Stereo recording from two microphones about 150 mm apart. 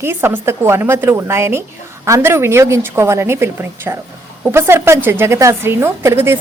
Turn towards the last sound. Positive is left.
turn(degrees=-15)  # may be behind; listen again after turning